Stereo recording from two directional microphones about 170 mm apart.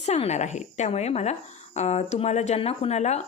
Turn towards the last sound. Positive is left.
turn(degrees=40)  # may be behind; listen again after turning